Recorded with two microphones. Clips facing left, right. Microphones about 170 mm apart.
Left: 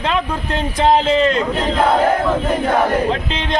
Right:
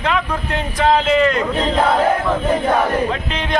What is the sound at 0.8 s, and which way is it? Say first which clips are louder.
Speech: left 1 dB; 25° left (ahead or behind).